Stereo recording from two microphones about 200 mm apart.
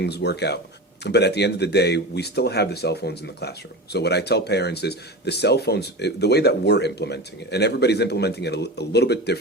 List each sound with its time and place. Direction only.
0.0 s speech: 55° left (ahead or behind)